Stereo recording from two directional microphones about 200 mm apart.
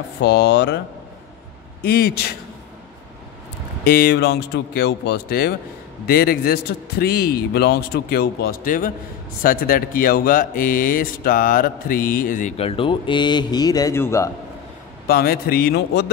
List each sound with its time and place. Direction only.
0.2 s speech: 60° left (ahead or behind)
1.9 s speech: 50° left (ahead or behind)
3.8 s speech: 50° left (ahead or behind); by 14.3 s 15° left (ahead or behind)
15.0 s speech: 50° left (ahead or behind)